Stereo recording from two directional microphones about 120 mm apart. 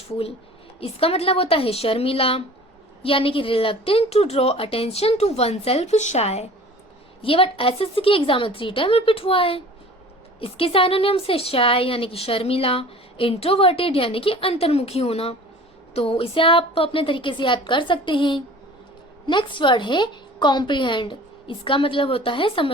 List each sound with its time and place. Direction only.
0.8 s a woman's voice: 55° left (ahead or behind)
7.2 s a woman's voice: 50° left (ahead or behind)